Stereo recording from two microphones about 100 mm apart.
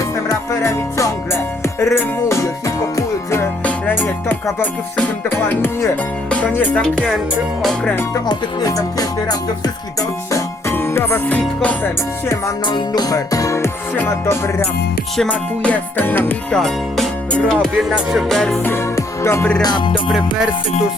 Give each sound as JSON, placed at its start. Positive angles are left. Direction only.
{"t": 0.3, "sound": "music", "side_deg": 30}
{"t": 3.6, "sound": "music", "side_deg": 15}
{"t": 8.3, "sound": "music", "side_deg": 35}
{"t": 10.3, "sound": "music", "side_deg": 25}
{"t": 11.3, "sound": "music", "side_deg": 15}
{"t": 12.6, "sound": "music", "side_deg": 45}
{"t": 13.9, "sound": "music", "side_deg": 20}
{"t": 15.2, "sound": "music", "side_deg": 10}
{"t": 16.5, "sound": "music", "side_deg": 5}
{"t": 18.9, "sound": "music", "side_deg": 25}
{"t": 19.6, "sound": "music", "side_deg": 55}
{"t": 20.1, "sound": "music", "side_deg": -5}